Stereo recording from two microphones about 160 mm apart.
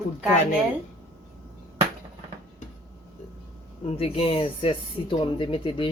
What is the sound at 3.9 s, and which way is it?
Speech, 35° left (ahead or behind).